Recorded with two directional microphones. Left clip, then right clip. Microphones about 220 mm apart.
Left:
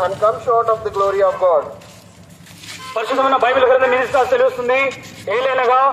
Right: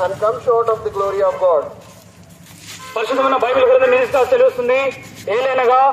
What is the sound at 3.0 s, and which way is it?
A man's voice, 40° right (ahead or behind).